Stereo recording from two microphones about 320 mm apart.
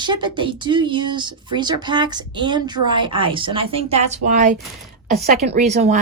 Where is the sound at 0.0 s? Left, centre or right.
Centre.